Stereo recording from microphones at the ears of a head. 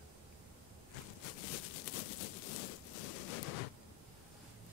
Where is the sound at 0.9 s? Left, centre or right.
Left.